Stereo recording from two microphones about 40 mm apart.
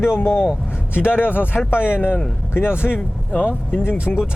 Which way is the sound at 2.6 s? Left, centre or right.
Left.